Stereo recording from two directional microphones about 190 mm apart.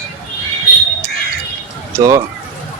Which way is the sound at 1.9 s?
15° right (ahead or behind).